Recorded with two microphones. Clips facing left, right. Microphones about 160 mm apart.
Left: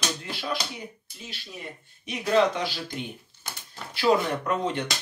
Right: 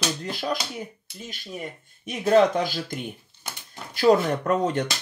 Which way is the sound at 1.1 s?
75° right (ahead or behind).